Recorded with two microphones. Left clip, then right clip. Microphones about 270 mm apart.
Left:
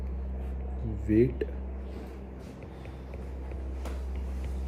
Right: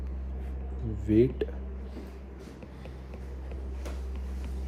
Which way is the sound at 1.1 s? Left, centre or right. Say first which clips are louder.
Right 1 dB; right.